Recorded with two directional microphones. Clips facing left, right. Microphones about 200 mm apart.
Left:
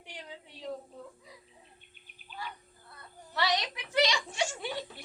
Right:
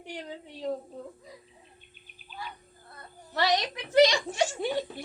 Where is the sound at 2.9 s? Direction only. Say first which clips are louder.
Right 4 dB; 45° right (ahead or behind).